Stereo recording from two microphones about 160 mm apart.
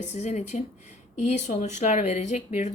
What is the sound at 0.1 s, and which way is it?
Speech, 45° left (ahead or behind).